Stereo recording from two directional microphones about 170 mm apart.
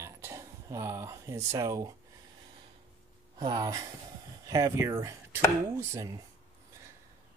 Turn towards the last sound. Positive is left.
turn(degrees=-20)  # may be behind; listen again after turning